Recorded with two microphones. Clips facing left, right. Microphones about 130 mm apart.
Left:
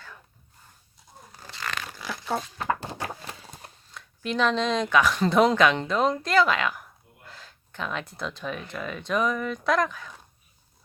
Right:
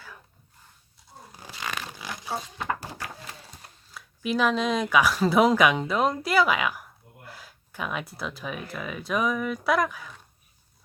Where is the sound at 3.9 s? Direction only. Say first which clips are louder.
Right 3 dB; 5° right (ahead or behind).